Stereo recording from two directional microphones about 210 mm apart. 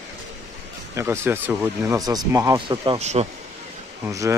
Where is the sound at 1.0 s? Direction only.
10° right (ahead or behind).